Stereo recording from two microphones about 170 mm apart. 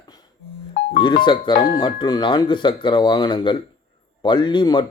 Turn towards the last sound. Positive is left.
turn(degrees=25)  # may be behind; listen again after turning